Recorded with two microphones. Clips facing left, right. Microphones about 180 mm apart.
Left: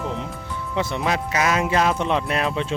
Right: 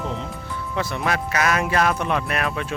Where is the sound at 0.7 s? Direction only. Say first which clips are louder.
Left 1 dB; 20° left (ahead or behind).